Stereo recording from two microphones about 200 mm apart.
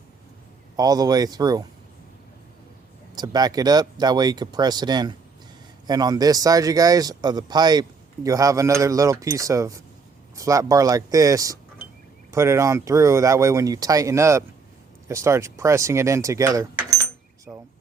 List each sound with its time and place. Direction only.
0.8 s speech: 20° right (ahead or behind)
3.2 s speech: 20° right (ahead or behind)